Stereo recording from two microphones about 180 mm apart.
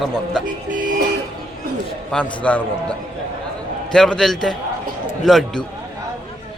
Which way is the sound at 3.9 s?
5° left (ahead or behind).